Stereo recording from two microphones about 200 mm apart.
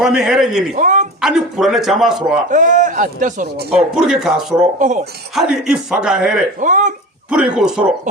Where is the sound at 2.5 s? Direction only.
40° right (ahead or behind).